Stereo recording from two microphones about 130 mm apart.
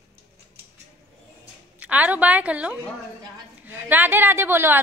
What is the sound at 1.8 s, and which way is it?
A woman's voice, 10° right (ahead or behind).